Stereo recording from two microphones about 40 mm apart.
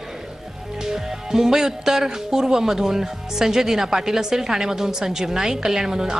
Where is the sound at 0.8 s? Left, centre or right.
Centre.